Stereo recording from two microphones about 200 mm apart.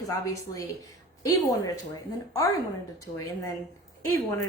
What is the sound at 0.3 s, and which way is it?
A woman's voice, 15° left (ahead or behind).